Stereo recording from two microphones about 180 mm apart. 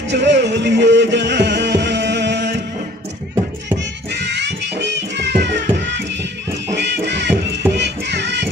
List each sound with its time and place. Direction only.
0.1 s music: 75° right (ahead or behind)
4.1 s music: 75° right (ahead or behind)
6.7 s music: 75° right (ahead or behind)